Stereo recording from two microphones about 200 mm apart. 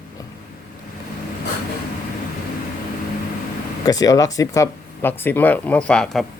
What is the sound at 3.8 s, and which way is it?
Speech, 20° left (ahead or behind).